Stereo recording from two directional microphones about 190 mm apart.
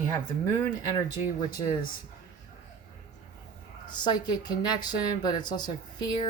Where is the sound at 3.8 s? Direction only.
25° left (ahead or behind).